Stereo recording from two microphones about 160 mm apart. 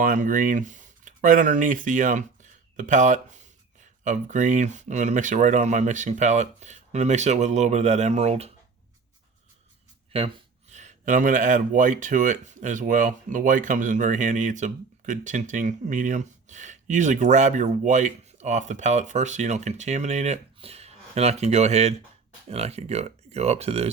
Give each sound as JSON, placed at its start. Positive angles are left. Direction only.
{"t": 0.0, "sound": "speech", "side_deg": -60}
{"t": 10.1, "sound": "speech", "side_deg": -35}